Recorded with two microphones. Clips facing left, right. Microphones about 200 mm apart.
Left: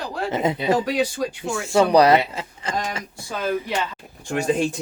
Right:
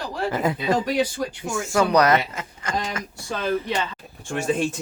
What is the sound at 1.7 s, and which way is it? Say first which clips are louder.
Speech: left 3 dB; 30° left (ahead or behind).